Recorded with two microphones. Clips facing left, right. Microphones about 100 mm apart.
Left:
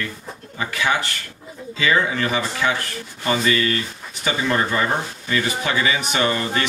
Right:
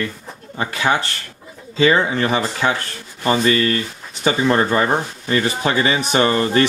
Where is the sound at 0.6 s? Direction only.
35° right (ahead or behind).